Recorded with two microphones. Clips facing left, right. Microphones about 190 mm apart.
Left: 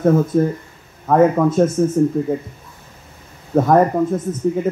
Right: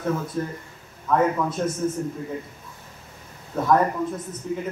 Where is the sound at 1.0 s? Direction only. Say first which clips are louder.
Left 8 dB; 50° left (ahead or behind).